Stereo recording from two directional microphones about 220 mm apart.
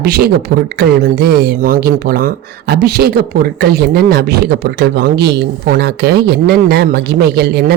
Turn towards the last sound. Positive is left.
turn(degrees=-50)  # may be behind; listen again after turning